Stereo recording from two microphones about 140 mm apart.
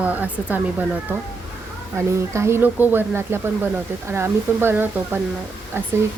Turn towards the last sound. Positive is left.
turn(degrees=-15)  # may be behind; listen again after turning